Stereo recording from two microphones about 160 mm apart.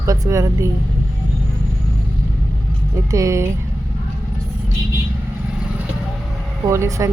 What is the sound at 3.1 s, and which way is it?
Speech, 20° right (ahead or behind).